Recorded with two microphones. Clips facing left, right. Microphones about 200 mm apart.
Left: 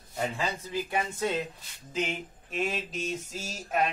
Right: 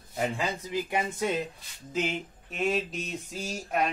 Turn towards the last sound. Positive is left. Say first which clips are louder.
# even
turn(degrees=0)  # may be behind; listen again after turning